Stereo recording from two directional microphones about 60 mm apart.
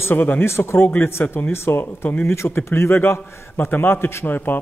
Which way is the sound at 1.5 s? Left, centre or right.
Left.